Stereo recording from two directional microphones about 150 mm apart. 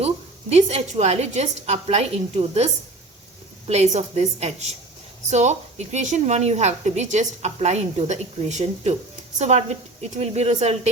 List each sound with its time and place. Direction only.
0.5 s a woman's voice: 45° right (ahead or behind)
3.7 s a woman's voice: 45° right (ahead or behind)